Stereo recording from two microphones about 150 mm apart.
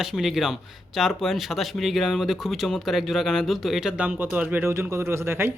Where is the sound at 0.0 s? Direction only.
5° right (ahead or behind).